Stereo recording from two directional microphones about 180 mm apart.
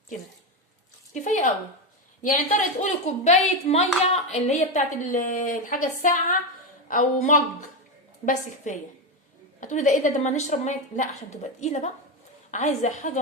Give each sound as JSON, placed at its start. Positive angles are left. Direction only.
{"t": 1.1, "sound": "a woman's voice", "side_deg": 45}